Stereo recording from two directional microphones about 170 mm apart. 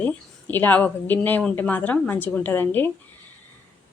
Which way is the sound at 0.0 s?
10° left (ahead or behind).